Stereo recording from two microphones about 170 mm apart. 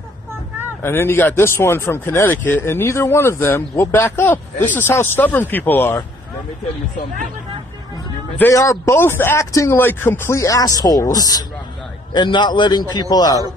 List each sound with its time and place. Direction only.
0.8 s speech: 15° left (ahead or behind)
8.4 s a man's voice: 15° left (ahead or behind)